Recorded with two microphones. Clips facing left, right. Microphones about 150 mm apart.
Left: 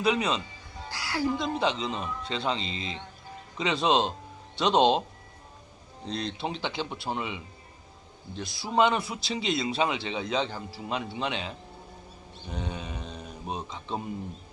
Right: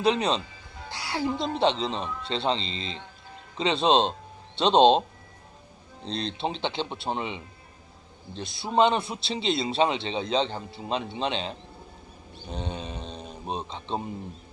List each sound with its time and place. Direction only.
0.0 s speech: 30° right (ahead or behind)
2.6 s speech: 15° left (ahead or behind)
3.6 s speech: 25° right (ahead or behind)
6.1 s speech: 25° right (ahead or behind)